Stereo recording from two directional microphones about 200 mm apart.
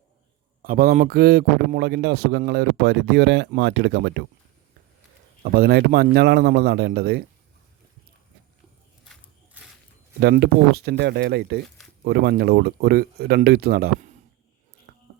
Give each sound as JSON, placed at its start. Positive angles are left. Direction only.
{"t": 0.6, "sound": "a man's voice", "side_deg": -45}
{"t": 5.4, "sound": "speech", "side_deg": -50}
{"t": 10.2, "sound": "speech", "side_deg": -55}
{"t": 14.9, "sound": "a sound", "side_deg": -50}